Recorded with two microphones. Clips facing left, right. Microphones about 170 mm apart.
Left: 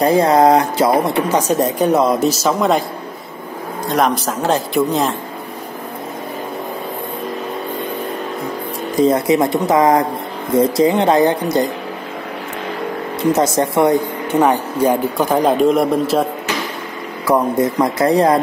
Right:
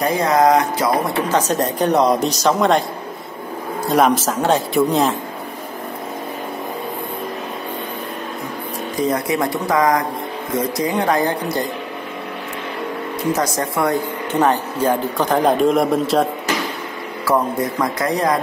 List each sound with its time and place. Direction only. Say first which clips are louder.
0.0 s speech: left 4 dB; 30° left (ahead or behind)
1.3 s speech: left 1 dB; 10° left (ahead or behind)
3.8 s speech: right 1 dB; centre (ahead or behind)
9.0 s speech: left 6 dB; 25° left (ahead or behind)
13.3 s speech: left 5 dB; 25° left (ahead or behind); by 16.3 s centre (ahead or behind)
17.7 s speech: left 7 dB; 30° left (ahead or behind)